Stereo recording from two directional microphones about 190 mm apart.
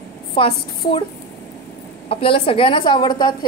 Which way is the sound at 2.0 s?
30° left (ahead or behind).